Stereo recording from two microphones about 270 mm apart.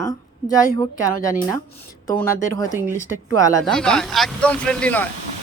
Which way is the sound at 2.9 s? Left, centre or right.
Centre.